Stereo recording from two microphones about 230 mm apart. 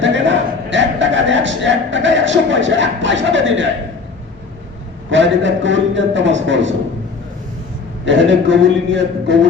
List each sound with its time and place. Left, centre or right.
0.0 s a man's voice: right
5.1 s a man's voice: right
8.0 s a man's voice: right